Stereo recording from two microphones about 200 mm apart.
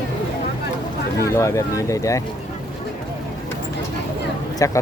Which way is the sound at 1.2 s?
15° left (ahead or behind).